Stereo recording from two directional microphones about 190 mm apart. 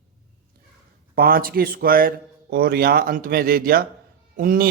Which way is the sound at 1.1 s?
50° right (ahead or behind).